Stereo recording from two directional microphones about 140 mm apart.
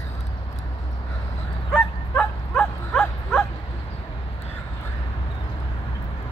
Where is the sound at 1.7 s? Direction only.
10° left (ahead or behind).